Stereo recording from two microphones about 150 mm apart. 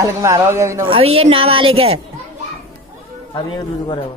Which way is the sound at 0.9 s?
40° right (ahead or behind).